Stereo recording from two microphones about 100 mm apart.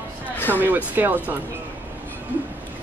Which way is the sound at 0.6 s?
20° right (ahead or behind).